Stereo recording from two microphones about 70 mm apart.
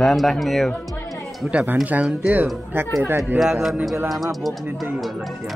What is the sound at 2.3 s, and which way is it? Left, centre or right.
Speech, right.